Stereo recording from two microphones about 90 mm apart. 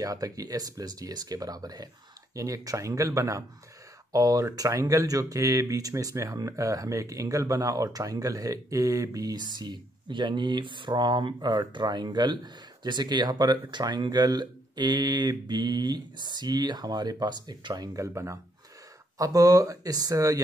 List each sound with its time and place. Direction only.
0.0 s speech: 40° right (ahead or behind)